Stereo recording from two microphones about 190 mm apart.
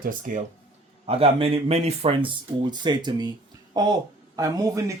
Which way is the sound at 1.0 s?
30° right (ahead or behind).